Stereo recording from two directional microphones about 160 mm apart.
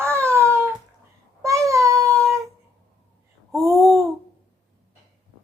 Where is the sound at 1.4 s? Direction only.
20° right (ahead or behind).